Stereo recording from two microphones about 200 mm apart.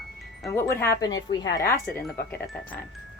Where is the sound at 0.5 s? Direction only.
10° left (ahead or behind).